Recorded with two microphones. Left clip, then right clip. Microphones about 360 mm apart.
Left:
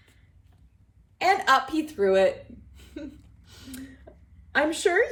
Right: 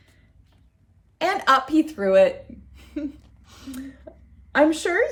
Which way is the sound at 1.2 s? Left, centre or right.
Centre.